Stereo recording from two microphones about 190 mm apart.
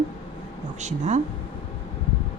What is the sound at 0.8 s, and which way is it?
Speech, 35° right (ahead or behind).